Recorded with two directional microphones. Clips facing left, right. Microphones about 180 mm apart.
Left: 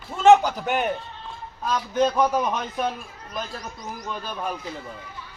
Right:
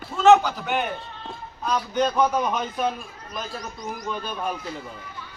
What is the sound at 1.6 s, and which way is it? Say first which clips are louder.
A man's voice: left 1 dB; centre (ahead or behind).